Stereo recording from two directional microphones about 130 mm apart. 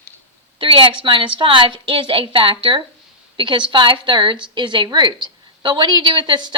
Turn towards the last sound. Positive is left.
turn(degrees=-35)  # may be behind; listen again after turning